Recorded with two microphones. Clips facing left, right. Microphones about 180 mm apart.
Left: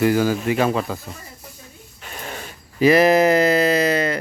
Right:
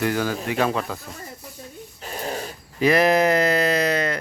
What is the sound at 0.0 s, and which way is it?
Speech, 5° left (ahead or behind).